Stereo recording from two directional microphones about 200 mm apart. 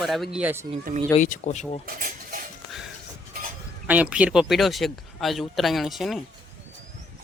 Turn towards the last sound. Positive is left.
turn(degrees=0)  # may be behind; listen again after turning